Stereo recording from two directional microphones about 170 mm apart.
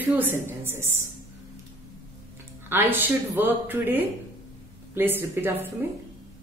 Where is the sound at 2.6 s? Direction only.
10° right (ahead or behind).